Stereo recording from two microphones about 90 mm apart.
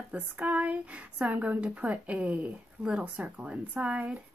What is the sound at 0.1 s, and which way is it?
A woman's voice, 15° right (ahead or behind).